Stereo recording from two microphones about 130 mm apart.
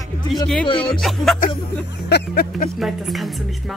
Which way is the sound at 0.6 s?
40° left (ahead or behind).